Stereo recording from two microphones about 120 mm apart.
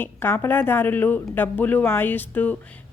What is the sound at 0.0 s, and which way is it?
Speech, 20° left (ahead or behind).